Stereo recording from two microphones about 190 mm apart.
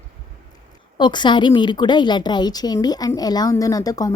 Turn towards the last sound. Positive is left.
turn(degrees=20)  # may be behind; listen again after turning